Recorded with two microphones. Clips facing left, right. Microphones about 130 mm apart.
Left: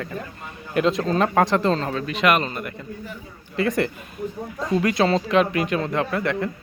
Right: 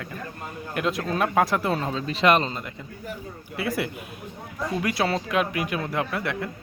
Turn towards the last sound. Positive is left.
turn(degrees=-5)  # may be behind; listen again after turning